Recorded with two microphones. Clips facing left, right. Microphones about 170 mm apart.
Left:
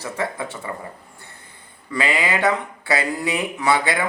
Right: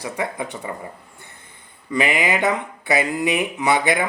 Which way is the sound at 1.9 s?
20° right (ahead or behind).